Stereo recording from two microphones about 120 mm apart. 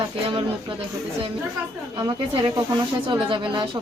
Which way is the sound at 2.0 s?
45° right (ahead or behind).